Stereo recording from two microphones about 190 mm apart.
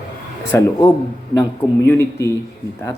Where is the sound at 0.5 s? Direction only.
15° left (ahead or behind).